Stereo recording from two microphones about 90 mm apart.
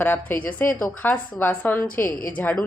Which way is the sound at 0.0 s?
25° left (ahead or behind).